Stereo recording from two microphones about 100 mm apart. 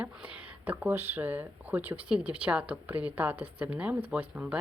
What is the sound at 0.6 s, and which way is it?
Speech, 15° right (ahead or behind).